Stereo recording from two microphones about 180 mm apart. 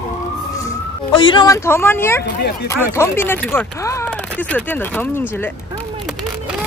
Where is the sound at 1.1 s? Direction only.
25° left (ahead or behind).